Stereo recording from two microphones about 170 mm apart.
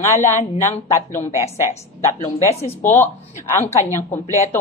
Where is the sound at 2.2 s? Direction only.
35° left (ahead or behind).